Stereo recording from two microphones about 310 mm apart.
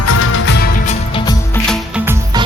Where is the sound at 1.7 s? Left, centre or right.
Centre.